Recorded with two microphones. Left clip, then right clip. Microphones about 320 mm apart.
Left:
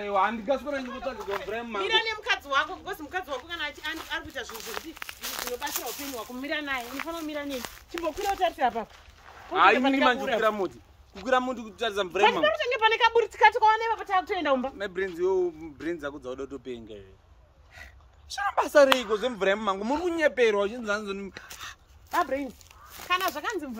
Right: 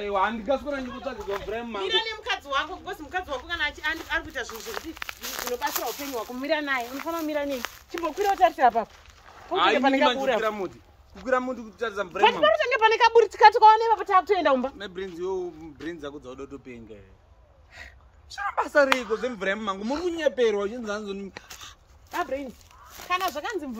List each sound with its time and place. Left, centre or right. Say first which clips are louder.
0.0 s speech: even; centre
9.5 s speech: left 2 dB; centre
9.8 s speech: right 3 dB; centre
10.4 s speech: left 2 dB; left
12.4 s speech: right 3 dB; centre
14.8 s speech: left 4 dB; centre
18.3 s speech: left 1 dB; left; by 21.3 s centre
21.3 s speech: right 1 dB; centre
21.5 s dog: left 3 dB; centre
22.9 s speech: even; centre